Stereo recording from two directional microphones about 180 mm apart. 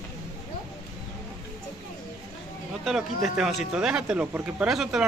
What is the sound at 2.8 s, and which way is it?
Speech, centre (ahead or behind).